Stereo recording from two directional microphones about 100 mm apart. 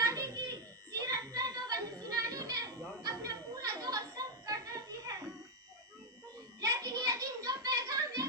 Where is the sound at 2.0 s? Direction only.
40° right (ahead or behind).